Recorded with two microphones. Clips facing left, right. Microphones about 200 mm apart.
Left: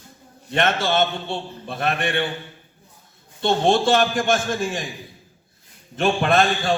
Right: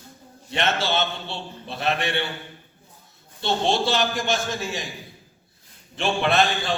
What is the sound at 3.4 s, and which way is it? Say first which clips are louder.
A man's voice: left 4 dB; 50° left (ahead or behind).